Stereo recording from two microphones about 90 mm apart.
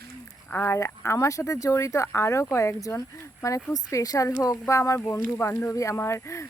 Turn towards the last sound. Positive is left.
turn(degrees=30)  # may be behind; listen again after turning